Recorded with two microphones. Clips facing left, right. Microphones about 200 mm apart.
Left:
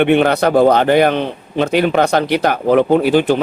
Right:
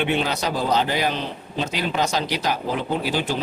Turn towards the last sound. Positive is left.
turn(degrees=60)  # may be behind; listen again after turning